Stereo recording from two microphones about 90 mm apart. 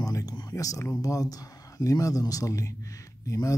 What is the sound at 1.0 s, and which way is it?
Speech, 40° left (ahead or behind).